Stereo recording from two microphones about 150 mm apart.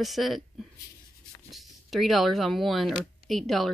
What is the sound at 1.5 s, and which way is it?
Speech, centre (ahead or behind).